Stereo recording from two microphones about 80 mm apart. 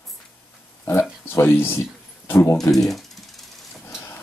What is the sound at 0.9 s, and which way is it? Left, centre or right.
Speech, left.